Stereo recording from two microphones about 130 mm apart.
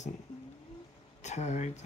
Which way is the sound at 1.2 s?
60° left (ahead or behind).